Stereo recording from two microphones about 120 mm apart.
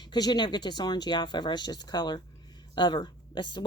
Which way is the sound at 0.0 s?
35° left (ahead or behind).